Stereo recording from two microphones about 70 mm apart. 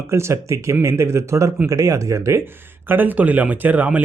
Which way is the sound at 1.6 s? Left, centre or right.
Right.